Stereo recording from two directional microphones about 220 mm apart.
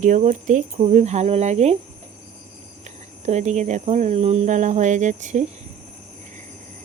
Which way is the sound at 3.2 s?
30° right (ahead or behind).